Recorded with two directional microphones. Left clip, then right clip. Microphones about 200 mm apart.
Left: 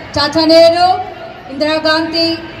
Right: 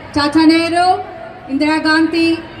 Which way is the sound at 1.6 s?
30° right (ahead or behind).